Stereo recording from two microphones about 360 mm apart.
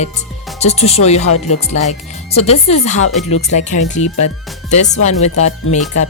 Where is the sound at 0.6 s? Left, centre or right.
Centre.